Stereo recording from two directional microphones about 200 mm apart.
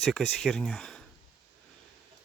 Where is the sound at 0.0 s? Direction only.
Centre (ahead or behind).